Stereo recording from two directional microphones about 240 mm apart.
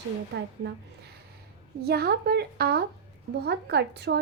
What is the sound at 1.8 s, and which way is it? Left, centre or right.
A woman's voice, right.